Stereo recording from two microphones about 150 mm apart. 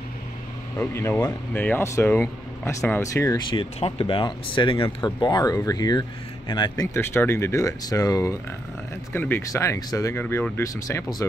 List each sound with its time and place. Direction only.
0.7 s speech: 15° left (ahead or behind)